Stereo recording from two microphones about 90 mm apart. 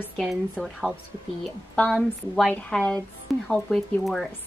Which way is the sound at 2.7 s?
10° left (ahead or behind).